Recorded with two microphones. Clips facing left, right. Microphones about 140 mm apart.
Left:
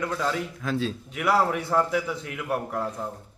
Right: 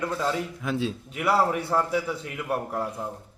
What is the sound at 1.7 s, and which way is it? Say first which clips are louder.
Speech: left 1 dB; 30° right (ahead or behind).